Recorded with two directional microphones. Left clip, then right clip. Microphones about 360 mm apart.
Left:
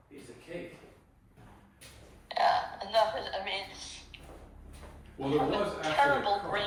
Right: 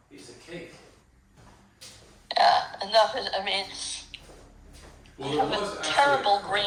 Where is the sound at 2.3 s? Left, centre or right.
Right.